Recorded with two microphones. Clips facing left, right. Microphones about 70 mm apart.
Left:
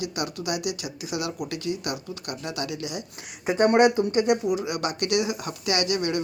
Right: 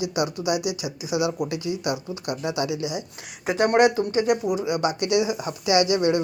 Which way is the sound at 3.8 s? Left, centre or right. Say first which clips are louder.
Even; left.